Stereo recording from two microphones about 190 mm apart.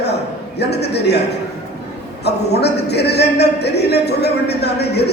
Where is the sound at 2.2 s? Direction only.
60° left (ahead or behind).